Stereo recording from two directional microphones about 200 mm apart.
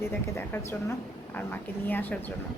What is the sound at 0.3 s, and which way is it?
A woman's voice, 10° left (ahead or behind).